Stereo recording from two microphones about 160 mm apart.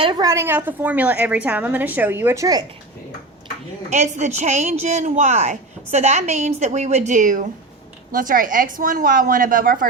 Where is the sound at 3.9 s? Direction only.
45° right (ahead or behind).